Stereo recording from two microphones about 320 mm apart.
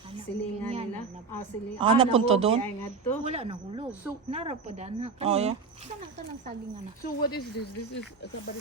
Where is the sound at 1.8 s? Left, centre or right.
Centre.